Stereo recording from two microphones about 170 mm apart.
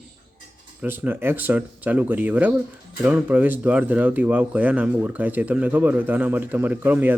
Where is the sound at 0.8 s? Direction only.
10° right (ahead or behind).